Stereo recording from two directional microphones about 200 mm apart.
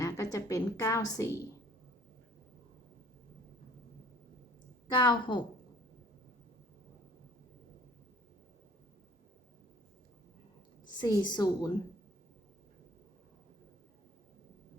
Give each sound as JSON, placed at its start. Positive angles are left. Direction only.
{"t": 0.0, "sound": "a woman's voice", "side_deg": 15}
{"t": 4.9, "sound": "a woman's voice", "side_deg": 25}
{"t": 11.0, "sound": "a woman's voice", "side_deg": 20}